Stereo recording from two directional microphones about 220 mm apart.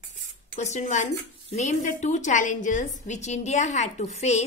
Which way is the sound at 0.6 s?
30° left (ahead or behind).